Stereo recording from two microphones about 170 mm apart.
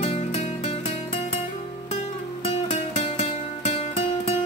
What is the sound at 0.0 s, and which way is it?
Music, 40° left (ahead or behind).